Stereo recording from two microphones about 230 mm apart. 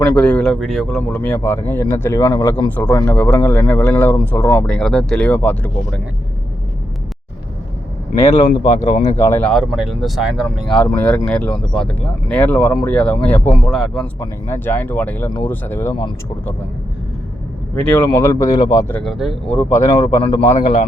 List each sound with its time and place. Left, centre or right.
0.1 s speech: centre
8.3 s speech: left
9.2 s speech: centre
17.7 s speech: centre